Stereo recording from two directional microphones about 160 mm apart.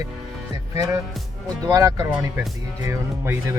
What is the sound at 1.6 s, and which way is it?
Speech, 20° right (ahead or behind).